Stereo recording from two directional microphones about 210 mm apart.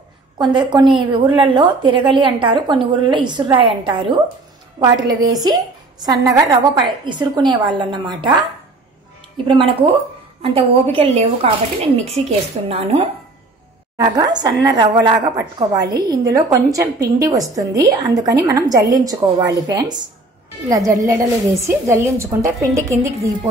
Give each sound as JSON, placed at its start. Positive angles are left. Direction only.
{"t": 0.4, "sound": "a woman's voice", "side_deg": -20}
{"t": 9.5, "sound": "a woman's voice", "side_deg": -25}
{"t": 13.9, "sound": "a woman's voice", "side_deg": -20}